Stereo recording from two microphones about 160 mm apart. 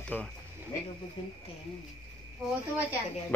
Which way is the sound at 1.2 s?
30° left (ahead or behind).